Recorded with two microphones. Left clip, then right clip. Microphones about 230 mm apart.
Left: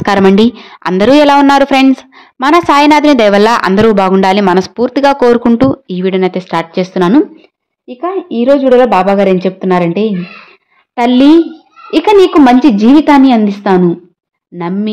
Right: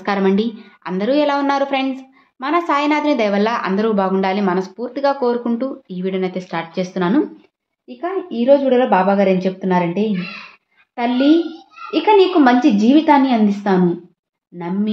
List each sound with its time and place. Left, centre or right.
0.0 s a woman's voice: left